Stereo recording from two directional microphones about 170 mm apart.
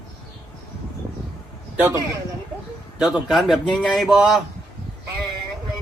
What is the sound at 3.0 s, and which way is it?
A man's voice, centre (ahead or behind).